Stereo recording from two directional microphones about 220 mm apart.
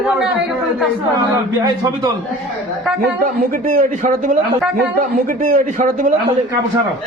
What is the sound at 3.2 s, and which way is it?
A man's voice, 35° right (ahead or behind).